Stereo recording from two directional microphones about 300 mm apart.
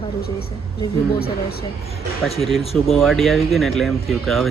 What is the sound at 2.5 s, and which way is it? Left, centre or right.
Speech, centre.